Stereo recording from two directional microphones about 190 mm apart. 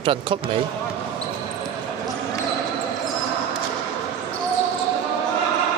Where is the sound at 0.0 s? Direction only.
25° right (ahead or behind).